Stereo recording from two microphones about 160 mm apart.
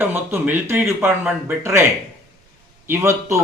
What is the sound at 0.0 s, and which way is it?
A man's voice, 15° right (ahead or behind).